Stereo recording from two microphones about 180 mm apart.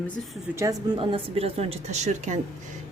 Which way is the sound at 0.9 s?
30° right (ahead or behind).